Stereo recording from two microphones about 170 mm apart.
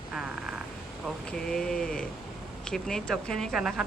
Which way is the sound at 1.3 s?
5° left (ahead or behind).